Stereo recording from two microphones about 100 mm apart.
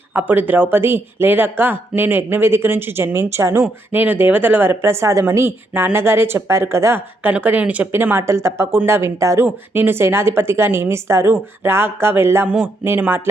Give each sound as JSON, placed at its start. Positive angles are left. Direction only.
{"t": 0.1, "sound": "speech", "side_deg": -20}
{"t": 7.2, "sound": "speech", "side_deg": -15}